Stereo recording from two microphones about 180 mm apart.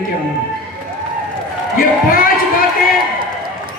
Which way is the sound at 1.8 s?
50° left (ahead or behind).